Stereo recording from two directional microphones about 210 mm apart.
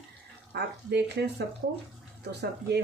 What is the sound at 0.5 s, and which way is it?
Speech, 50° right (ahead or behind).